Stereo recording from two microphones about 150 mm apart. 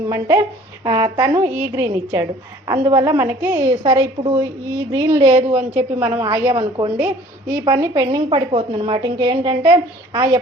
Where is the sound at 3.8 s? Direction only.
30° right (ahead or behind).